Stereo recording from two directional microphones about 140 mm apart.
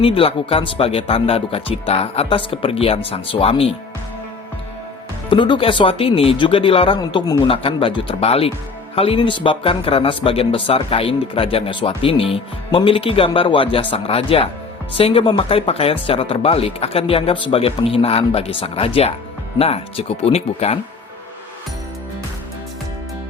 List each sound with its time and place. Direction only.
0.0 s speech: 40° left (ahead or behind)
5.3 s speech: 35° left (ahead or behind)